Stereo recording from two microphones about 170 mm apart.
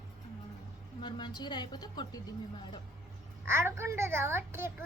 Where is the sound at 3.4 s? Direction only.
15° right (ahead or behind).